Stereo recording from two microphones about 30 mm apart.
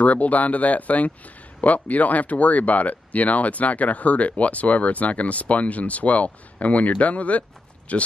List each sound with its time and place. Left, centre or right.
0.0 s speech: left